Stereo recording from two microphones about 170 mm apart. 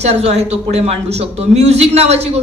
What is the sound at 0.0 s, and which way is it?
A man's voice, 40° right (ahead or behind).